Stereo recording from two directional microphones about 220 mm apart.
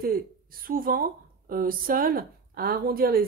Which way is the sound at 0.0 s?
40° right (ahead or behind).